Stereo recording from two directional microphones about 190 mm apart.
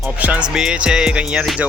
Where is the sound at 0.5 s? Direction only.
5° right (ahead or behind).